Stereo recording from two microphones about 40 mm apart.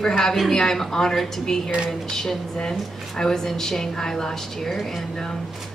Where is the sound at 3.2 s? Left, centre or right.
Centre.